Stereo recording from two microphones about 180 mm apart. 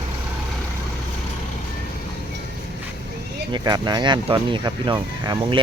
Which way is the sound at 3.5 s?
25° right (ahead or behind).